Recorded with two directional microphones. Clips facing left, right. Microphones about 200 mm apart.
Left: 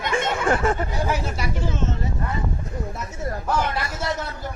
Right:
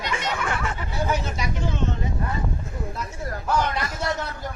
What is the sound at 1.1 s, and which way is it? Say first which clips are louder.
Speech: left 1 dB; 10° left (ahead or behind).